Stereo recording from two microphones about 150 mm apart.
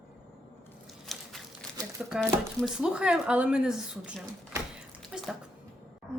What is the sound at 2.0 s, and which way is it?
Speech, 5° right (ahead or behind).